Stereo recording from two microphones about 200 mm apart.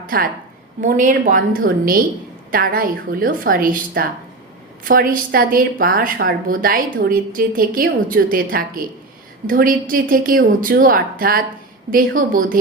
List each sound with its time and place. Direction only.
0.1 s a woman's voice: 45° right (ahead or behind)